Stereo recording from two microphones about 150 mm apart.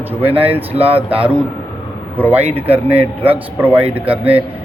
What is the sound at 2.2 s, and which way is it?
A man's voice, 10° right (ahead or behind).